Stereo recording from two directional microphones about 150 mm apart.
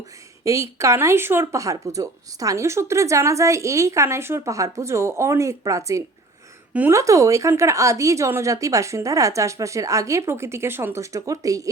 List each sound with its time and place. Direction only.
0.4 s speech: 20° right (ahead or behind)